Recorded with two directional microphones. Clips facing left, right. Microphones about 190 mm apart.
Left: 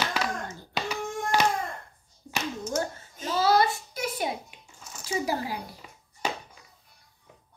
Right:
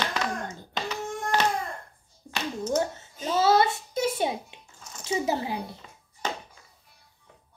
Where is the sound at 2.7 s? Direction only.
25° right (ahead or behind).